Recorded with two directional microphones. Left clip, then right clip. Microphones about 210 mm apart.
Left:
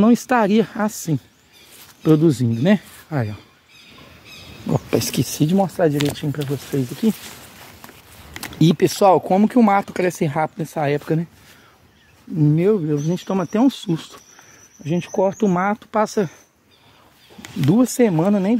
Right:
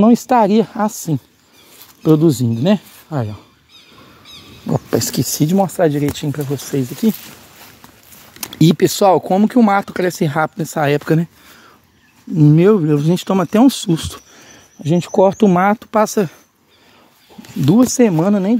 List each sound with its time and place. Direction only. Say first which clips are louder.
0.0 s speech: right 4 dB; 5° right (ahead or behind)
4.6 s speech: right 3 dB; 15° right (ahead or behind)
8.4 s speech: right 4 dB; 25° right (ahead or behind)
12.4 s speech: right 6 dB; 40° right (ahead or behind)
14.8 s speech: right 7 dB; 45° right (ahead or behind); by 16.3 s 25° right (ahead or behind)
17.6 s speech: right 4 dB; 25° right (ahead or behind)